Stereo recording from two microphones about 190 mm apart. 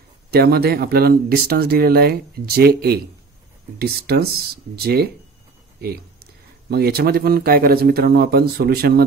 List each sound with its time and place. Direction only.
0.3 s speech: 55° right (ahead or behind)
5.8 s a sound: 55° right (ahead or behind)
6.7 s speech: 55° right (ahead or behind)